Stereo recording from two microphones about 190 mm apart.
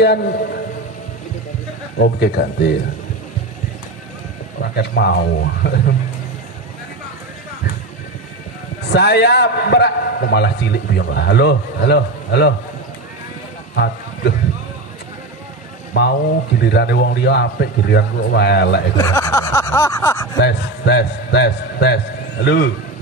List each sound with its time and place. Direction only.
0.0 s a man's voice: 60° left (ahead or behind)
2.0 s a man's voice: 55° left (ahead or behind)
4.6 s a man's voice: 60° left (ahead or behind)
8.9 s a man's voice: 60° left (ahead or behind)
15.9 s a man's voice: 60° left (ahead or behind)
18.9 s a sound: 20° left (ahead or behind)
20.3 s a man's voice: 60° left (ahead or behind)